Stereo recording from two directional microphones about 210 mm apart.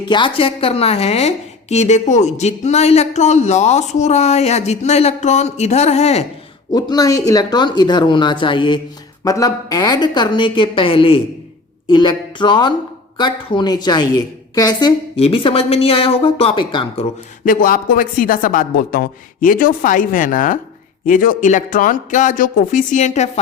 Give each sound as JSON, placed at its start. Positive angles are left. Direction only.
{"t": 0.0, "sound": "a woman's voice", "side_deg": 20}
{"t": 6.7, "sound": "a woman's voice", "side_deg": 20}
{"t": 17.4, "sound": "speech", "side_deg": 40}